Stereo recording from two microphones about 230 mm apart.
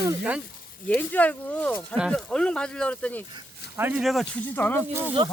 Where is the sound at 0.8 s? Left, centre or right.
Centre.